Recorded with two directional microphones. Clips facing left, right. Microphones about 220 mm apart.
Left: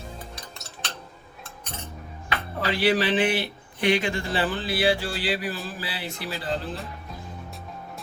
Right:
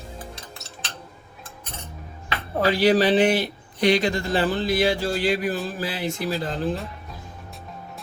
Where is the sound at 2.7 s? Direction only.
40° right (ahead or behind).